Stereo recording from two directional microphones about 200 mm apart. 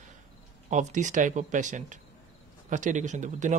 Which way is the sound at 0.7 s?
40° right (ahead or behind).